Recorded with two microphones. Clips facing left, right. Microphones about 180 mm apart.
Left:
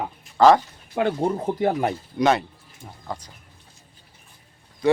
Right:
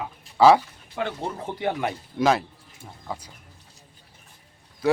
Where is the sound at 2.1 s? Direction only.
Centre (ahead or behind).